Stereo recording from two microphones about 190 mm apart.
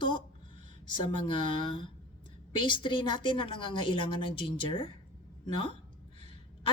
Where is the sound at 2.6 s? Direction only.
25° left (ahead or behind).